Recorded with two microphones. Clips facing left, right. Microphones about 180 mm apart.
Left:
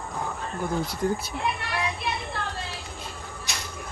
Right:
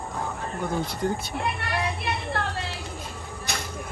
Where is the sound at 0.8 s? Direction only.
Centre (ahead or behind).